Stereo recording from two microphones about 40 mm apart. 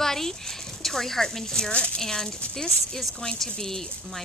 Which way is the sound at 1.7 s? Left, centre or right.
Left.